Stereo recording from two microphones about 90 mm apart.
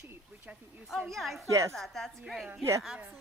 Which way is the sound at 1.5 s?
35° right (ahead or behind).